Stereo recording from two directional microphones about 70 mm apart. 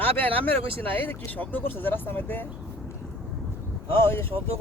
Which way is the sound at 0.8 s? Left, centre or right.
Left.